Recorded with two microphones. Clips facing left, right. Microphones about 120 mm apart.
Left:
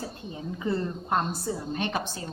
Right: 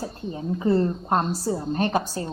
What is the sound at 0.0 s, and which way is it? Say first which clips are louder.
A woman's voice: right 5 dB; 40° right (ahead or behind).